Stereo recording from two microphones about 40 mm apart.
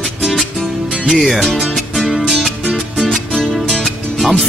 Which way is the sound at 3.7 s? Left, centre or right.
Centre.